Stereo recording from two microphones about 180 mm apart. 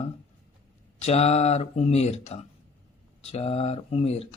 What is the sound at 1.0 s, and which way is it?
Speech, 35° left (ahead or behind).